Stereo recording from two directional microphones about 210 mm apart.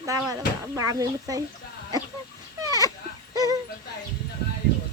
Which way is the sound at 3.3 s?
15° right (ahead or behind).